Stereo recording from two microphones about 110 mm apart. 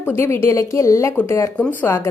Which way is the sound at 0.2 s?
20° left (ahead or behind).